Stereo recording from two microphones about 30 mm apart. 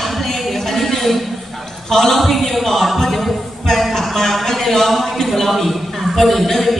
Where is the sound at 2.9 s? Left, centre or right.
Centre.